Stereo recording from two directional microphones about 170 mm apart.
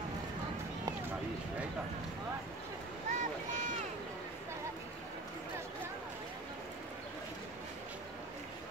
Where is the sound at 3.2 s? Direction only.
50° right (ahead or behind).